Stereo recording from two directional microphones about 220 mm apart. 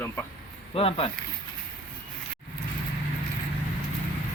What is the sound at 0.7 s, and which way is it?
Speech, 25° left (ahead or behind).